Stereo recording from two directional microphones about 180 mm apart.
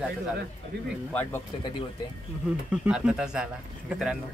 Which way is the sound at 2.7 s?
5° right (ahead or behind).